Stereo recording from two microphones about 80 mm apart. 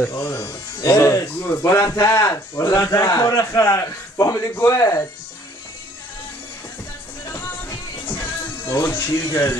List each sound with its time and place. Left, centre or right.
0.0 s speech: left
7.2 s music: left
8.2 s speech: left